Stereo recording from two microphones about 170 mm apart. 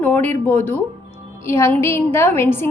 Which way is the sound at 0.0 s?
10° left (ahead or behind).